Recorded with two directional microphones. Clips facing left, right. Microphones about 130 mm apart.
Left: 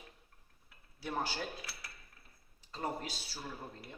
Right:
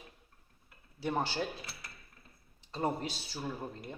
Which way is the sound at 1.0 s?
25° right (ahead or behind).